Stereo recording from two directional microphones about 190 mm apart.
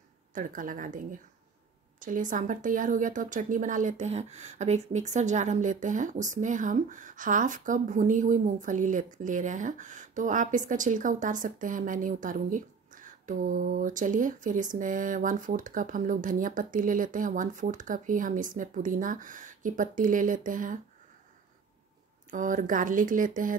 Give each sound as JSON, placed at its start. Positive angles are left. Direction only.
{"t": 0.3, "sound": "speech", "side_deg": -45}
{"t": 22.3, "sound": "speech", "side_deg": -45}